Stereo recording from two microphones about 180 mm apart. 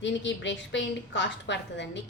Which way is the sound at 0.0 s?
85° left.